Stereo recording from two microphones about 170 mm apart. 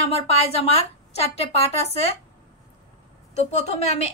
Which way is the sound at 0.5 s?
35° left (ahead or behind).